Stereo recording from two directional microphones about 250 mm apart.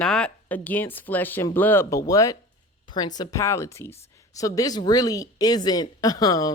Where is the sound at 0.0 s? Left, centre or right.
Centre.